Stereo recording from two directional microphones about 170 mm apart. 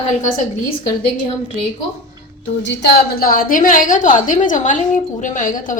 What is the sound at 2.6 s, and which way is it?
A woman's voice, 75° left (ahead or behind).